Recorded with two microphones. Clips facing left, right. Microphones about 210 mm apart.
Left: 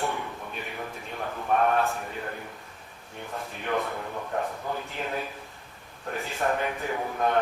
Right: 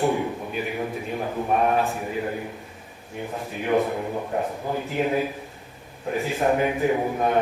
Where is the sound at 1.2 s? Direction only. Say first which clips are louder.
Right 2 dB; 10° right (ahead or behind).